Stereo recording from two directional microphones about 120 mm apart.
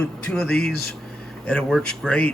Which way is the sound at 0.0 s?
5° left (ahead or behind).